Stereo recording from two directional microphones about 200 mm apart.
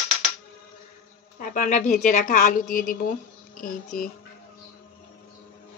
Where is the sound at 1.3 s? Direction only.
40° left (ahead or behind).